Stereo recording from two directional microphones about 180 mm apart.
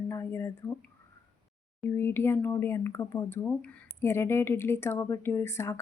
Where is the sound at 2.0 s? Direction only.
15° left (ahead or behind).